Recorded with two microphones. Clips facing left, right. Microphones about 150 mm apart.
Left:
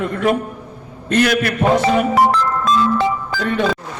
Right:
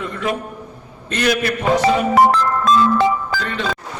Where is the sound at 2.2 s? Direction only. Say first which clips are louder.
Right 1 dB; 50° right (ahead or behind).